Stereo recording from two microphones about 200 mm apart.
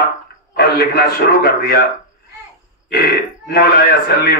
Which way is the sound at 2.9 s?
50° left (ahead or behind).